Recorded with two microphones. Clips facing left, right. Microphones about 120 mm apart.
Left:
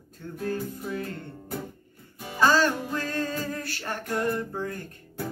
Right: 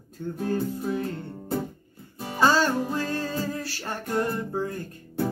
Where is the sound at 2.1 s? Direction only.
30° right (ahead or behind).